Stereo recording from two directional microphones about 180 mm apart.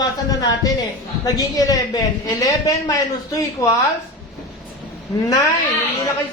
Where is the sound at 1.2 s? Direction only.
20° left (ahead or behind).